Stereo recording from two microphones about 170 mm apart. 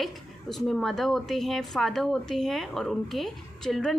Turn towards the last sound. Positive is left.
turn(degrees=0)  # may be behind; listen again after turning